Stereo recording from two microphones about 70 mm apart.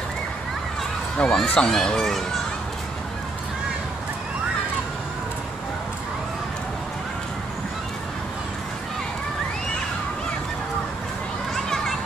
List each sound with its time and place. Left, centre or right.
1.1 s speech: centre